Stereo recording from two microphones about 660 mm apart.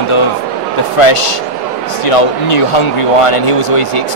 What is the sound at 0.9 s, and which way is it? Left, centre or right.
Speech, left.